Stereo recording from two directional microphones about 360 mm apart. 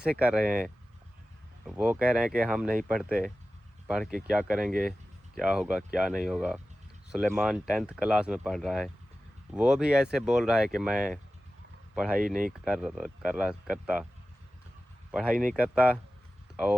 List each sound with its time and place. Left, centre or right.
0.0 s speech: centre
1.6 s speech: centre
12.1 s speech: right
12.6 s speech: centre
15.1 s speech: centre